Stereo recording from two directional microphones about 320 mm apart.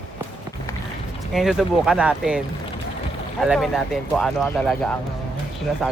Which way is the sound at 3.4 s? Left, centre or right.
Centre.